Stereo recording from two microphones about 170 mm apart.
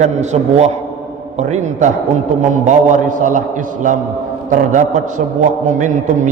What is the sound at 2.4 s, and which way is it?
Speech, 45° right (ahead or behind).